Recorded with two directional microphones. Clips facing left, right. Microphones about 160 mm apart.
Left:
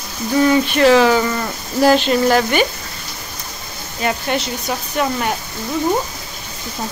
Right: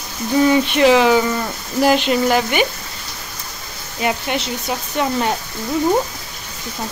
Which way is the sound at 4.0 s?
15° right (ahead or behind).